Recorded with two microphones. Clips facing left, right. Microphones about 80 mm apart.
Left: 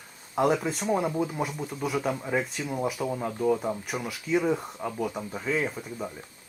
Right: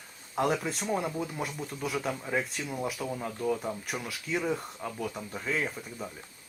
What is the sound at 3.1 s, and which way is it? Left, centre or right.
Speech, centre.